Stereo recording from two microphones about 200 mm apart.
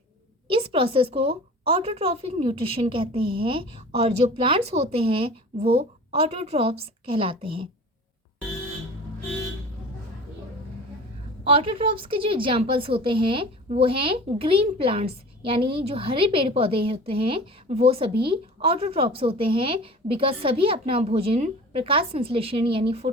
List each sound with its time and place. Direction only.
0.4 s a woman's voice: 25° right (ahead or behind)
11.4 s a woman's voice: 25° right (ahead or behind)